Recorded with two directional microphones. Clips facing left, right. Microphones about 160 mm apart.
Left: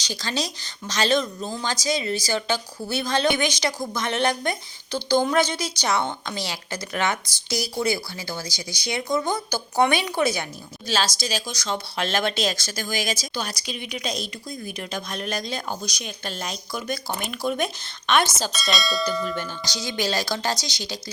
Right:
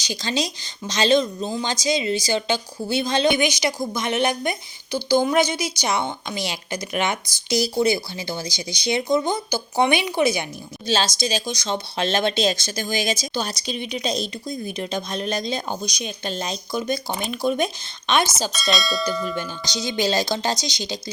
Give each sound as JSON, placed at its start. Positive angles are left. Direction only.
{"t": 0.0, "sound": "a woman's voice", "side_deg": -15}
{"t": 18.5, "sound": "speech", "side_deg": 0}
{"t": 19.2, "sound": "speech", "side_deg": -15}